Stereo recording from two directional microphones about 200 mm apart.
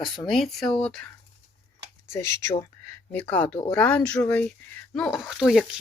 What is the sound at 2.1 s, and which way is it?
Speech, 15° left (ahead or behind).